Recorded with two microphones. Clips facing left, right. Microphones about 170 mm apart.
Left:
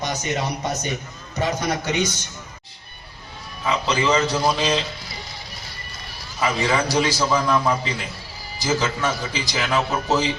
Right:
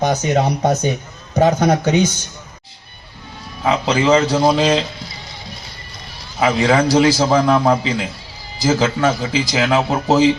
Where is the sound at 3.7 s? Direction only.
50° right (ahead or behind).